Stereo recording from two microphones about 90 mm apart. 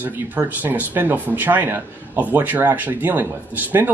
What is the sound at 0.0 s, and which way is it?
Speech, 20° right (ahead or behind).